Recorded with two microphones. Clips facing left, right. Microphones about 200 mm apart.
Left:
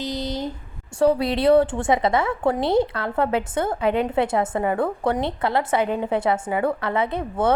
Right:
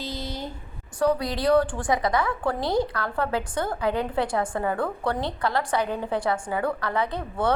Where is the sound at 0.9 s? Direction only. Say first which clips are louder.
Left 5 dB; 25° left (ahead or behind).